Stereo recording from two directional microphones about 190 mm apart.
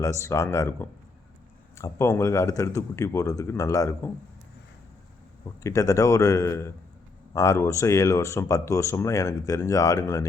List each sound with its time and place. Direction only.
0.0 s speech: 15° left (ahead or behind)
5.5 s speech: 15° left (ahead or behind)